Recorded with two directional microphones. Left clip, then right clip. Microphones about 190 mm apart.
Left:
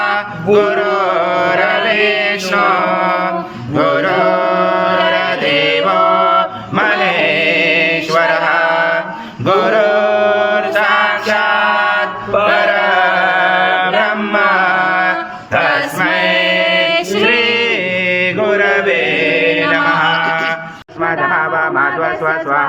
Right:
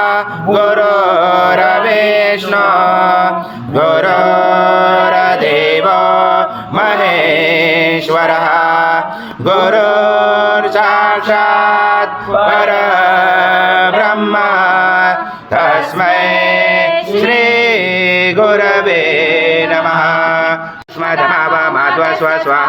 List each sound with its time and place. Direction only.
0.0 s mantra: 40° right (ahead or behind)
12.5 s chant: 40° right (ahead or behind)
16.0 s music: 40° right (ahead or behind)
17.2 s chant: 35° right (ahead or behind)
19.7 s mantra: 35° right (ahead or behind)
22.0 s a sound: 70° right (ahead or behind)